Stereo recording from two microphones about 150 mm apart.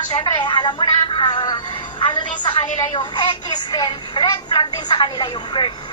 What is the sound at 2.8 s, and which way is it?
A woman's voice, 30° left (ahead or behind).